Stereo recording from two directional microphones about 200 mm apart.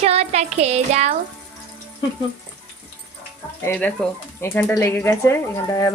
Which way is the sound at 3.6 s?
5° left (ahead or behind).